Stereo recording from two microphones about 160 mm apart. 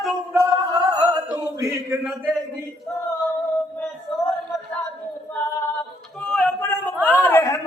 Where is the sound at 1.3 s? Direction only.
20° right (ahead or behind).